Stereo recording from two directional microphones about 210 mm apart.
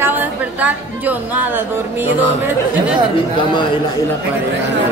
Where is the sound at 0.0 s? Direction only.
10° right (ahead or behind).